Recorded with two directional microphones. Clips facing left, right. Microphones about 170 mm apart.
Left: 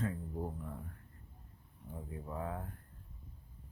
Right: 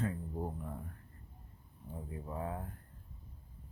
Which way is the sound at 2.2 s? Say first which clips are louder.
Even; 15° right (ahead or behind).